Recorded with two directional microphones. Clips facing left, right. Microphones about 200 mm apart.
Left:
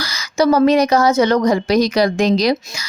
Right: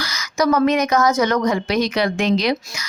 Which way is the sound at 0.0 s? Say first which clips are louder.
Left 4 dB; 30° left (ahead or behind).